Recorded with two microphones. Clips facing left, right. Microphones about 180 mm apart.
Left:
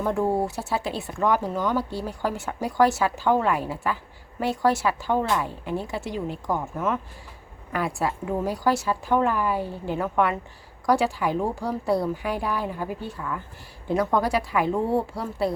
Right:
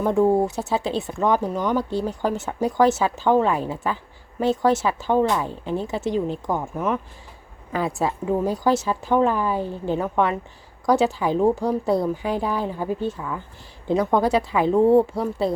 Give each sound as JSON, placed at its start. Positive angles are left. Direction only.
{"t": 0.0, "sound": "speech", "side_deg": -20}